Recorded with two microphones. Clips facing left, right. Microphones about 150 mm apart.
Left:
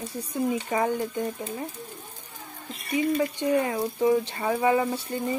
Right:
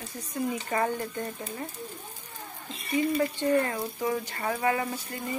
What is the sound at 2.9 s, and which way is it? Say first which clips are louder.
Speech: left 1 dB; 15° left (ahead or behind).